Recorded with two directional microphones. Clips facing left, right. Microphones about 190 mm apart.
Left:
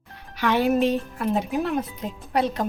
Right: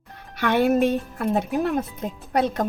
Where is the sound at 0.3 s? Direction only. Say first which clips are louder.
Right 1 dB; 55° right (ahead or behind).